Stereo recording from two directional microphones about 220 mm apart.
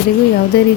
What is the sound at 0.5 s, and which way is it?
Speech, 45° left (ahead or behind).